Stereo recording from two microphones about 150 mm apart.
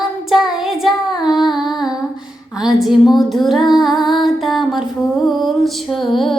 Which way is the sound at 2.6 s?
Centre (ahead or behind).